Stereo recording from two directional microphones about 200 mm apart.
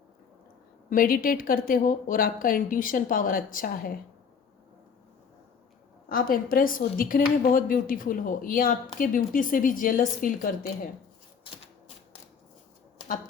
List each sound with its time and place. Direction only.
0.9 s speech: 45° left (ahead or behind)
6.1 s speech: 45° left (ahead or behind)